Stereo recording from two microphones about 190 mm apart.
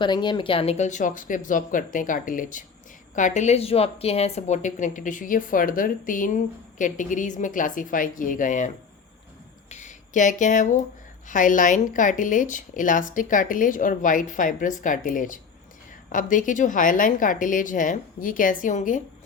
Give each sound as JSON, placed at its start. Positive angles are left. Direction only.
{"t": 0.0, "sound": "a woman's voice", "side_deg": 25}
{"t": 9.6, "sound": "a sound", "side_deg": 40}
{"t": 11.3, "sound": "a woman's voice", "side_deg": 45}